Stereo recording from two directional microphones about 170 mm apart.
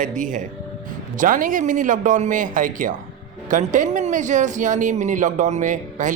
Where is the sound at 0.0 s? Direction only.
50° right (ahead or behind).